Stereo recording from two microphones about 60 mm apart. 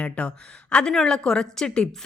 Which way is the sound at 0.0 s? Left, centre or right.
Centre.